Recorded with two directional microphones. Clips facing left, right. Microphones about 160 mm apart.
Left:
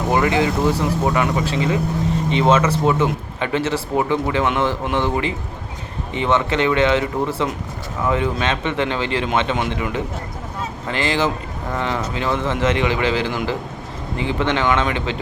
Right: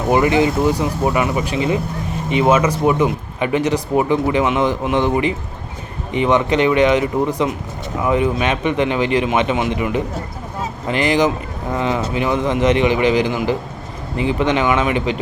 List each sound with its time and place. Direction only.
0.1 s speech: 20° right (ahead or behind)
1.5 s speech: 20° right (ahead or behind)